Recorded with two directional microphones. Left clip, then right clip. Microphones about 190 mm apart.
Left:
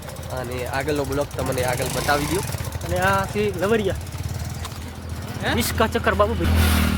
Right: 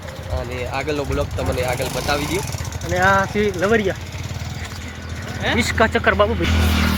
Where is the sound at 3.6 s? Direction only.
10° right (ahead or behind).